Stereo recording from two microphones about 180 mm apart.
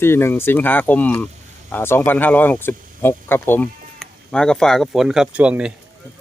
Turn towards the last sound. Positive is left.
turn(degrees=-5)  # may be behind; listen again after turning